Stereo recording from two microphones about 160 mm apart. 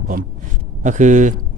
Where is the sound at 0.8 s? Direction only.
50° right (ahead or behind).